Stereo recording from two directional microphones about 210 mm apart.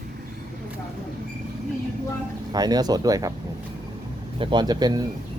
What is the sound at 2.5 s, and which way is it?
Speech, 20° right (ahead or behind).